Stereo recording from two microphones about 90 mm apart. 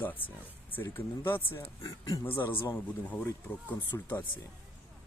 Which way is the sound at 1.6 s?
45° left (ahead or behind).